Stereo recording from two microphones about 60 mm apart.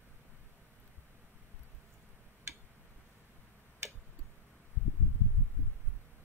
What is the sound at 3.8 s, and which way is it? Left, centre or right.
Tick-tock, right.